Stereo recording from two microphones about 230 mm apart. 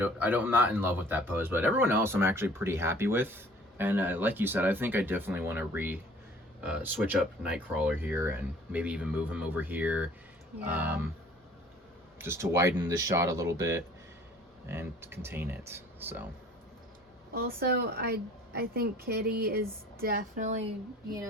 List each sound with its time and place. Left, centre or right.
0.0 s speech: centre
12.2 s speech: centre
17.3 s a woman's voice: right